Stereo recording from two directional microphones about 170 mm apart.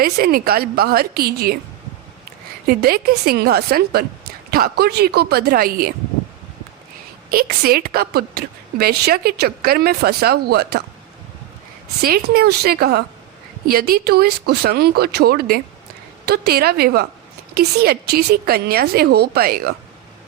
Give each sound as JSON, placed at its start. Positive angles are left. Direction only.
{"t": 0.0, "sound": "a woman's voice", "side_deg": -60}
{"t": 2.6, "sound": "a woman's voice", "side_deg": -60}
{"t": 7.3, "sound": "a woman's voice", "side_deg": -60}
{"t": 12.0, "sound": "a woman's voice", "side_deg": -60}